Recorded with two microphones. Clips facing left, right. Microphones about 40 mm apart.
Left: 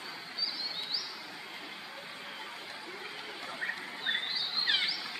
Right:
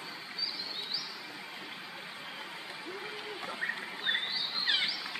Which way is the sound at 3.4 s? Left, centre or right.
Centre.